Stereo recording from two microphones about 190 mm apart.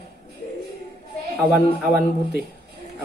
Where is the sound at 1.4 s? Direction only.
Centre (ahead or behind).